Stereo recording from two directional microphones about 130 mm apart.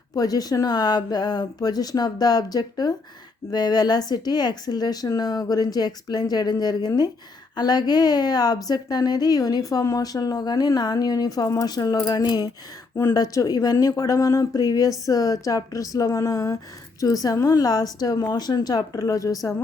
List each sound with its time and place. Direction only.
0.2 s speech: 30° left (ahead or behind)